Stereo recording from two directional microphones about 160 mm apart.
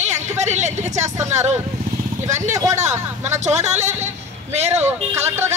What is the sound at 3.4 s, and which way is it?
A man's voice, 45° right (ahead or behind).